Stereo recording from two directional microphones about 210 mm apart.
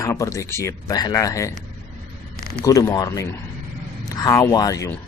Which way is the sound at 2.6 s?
15° left (ahead or behind).